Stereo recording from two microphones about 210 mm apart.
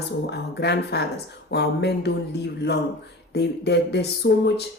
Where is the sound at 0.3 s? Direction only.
50° left (ahead or behind).